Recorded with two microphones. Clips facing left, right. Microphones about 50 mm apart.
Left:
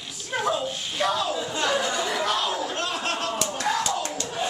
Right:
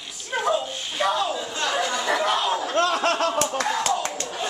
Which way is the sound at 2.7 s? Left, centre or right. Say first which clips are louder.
Right 7 dB; right.